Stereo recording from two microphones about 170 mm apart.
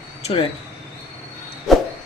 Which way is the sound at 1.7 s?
Centre (ahead or behind).